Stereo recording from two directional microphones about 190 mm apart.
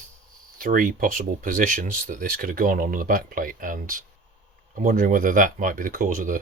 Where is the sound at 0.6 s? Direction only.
45° right (ahead or behind).